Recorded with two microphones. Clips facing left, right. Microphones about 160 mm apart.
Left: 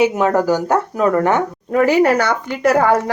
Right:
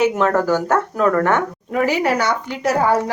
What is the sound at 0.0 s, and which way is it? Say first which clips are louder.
Speech: left 2 dB; 15° left (ahead or behind).